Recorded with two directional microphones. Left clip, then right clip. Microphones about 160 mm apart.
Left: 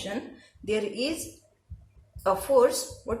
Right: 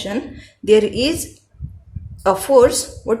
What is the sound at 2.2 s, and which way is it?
Speech, 55° right (ahead or behind).